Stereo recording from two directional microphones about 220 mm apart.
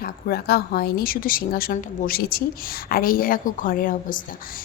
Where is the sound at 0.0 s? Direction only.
45° left (ahead or behind).